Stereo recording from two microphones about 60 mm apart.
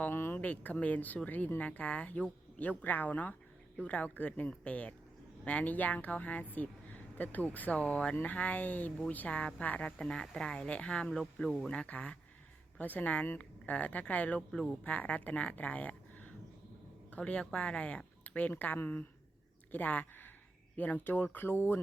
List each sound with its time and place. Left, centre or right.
0.1 s speech: left
0.3 s speech: left